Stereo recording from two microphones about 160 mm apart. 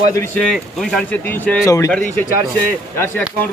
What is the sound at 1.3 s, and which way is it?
Speech, 10° left (ahead or behind).